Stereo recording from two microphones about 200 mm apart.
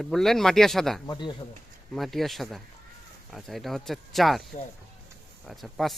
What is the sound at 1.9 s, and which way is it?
Speech, centre (ahead or behind).